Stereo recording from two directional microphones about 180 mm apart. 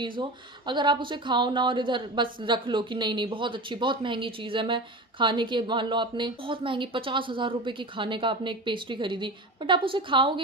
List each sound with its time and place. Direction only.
0.0 s a woman's voice: 25° right (ahead or behind)